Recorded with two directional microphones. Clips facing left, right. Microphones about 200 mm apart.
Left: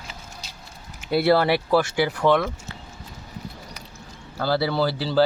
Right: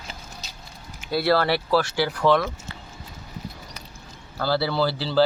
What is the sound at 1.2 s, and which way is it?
Speech, 20° left (ahead or behind).